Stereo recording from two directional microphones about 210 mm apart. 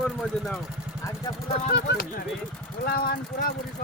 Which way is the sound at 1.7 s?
55° left (ahead or behind).